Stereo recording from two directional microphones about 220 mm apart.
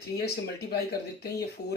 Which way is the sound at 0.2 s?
45° left (ahead or behind).